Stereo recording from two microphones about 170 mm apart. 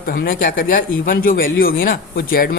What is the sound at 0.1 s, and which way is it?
A man's voice, 60° left (ahead or behind).